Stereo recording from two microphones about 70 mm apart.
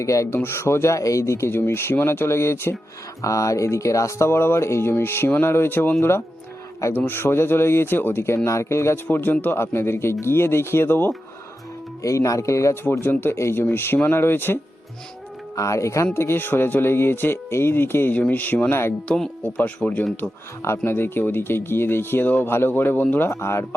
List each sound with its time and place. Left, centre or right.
0.0 s speech: left
0.3 s speech: left
3.2 s speech: left
9.0 s speech: left
12.0 s speech: left
12.8 s speech: left
15.5 s speech: left
16.1 s speech: left
20.6 s speech: left
23.3 s speech: left